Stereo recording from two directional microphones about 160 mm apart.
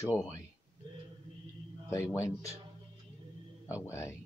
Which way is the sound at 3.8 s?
15° left (ahead or behind).